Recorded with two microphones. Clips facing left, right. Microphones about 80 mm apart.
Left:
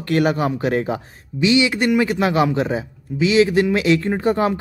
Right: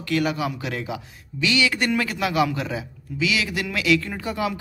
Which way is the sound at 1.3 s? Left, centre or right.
Left.